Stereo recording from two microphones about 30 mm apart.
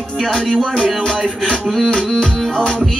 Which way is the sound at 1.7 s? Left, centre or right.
Centre.